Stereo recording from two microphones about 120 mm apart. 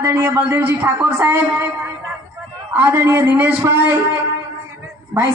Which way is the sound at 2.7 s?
20° right (ahead or behind).